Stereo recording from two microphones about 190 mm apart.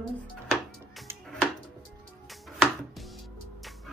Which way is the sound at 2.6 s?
Centre (ahead or behind).